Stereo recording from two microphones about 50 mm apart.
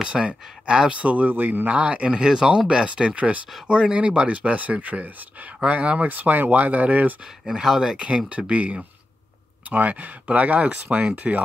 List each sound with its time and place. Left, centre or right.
0.0 s speech: centre
6.0 s speech: right
7.6 s speech: centre; by 11.4 s right